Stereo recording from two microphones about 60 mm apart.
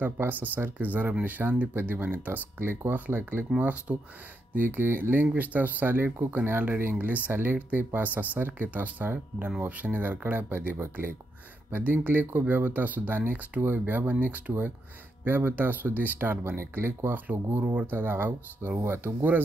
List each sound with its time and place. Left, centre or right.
0.0 s speech: right
3.5 s speech: right
4.6 s speech: right
15.2 s speech: right
18.8 s speech: right